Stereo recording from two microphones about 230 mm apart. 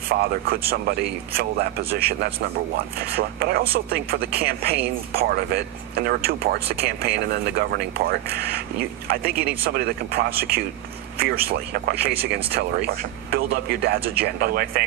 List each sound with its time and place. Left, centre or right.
0.1 s speech: right
9.6 s speech: right